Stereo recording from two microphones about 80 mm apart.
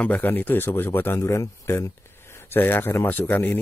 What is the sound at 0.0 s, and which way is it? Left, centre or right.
Speech, left.